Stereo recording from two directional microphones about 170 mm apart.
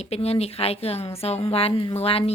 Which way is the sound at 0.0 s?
40° left (ahead or behind).